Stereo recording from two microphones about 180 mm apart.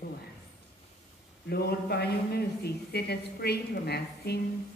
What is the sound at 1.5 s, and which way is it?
A man's voice, 60° left (ahead or behind).